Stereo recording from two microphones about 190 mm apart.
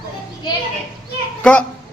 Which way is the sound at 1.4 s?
5° left (ahead or behind).